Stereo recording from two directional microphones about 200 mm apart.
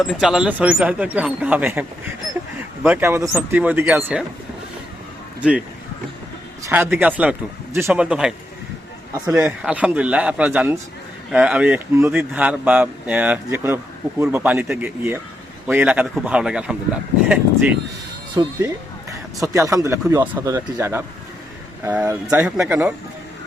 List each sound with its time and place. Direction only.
0.0 s a man's voice: centre (ahead or behind)
5.4 s speech: 5° right (ahead or behind)
6.7 s a man's voice: 10° right (ahead or behind)
18.4 s a man's voice: 15° right (ahead or behind)